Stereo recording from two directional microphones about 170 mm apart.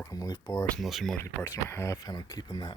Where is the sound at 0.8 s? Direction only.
Centre (ahead or behind).